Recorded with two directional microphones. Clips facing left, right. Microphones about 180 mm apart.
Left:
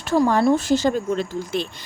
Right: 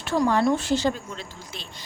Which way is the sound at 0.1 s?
40° left (ahead or behind).